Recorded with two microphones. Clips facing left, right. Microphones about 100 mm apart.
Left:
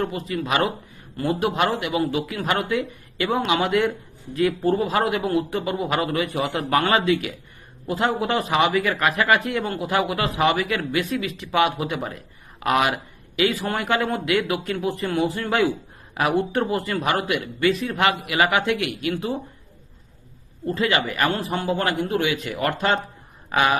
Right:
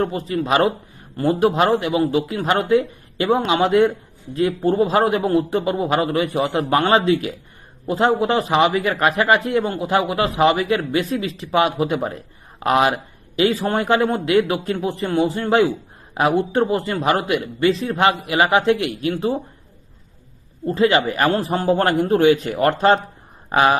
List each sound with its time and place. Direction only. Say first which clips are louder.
0.0 s a man's voice: right 4 dB; 30° right (ahead or behind)
20.7 s speech: right 6 dB; 30° right (ahead or behind)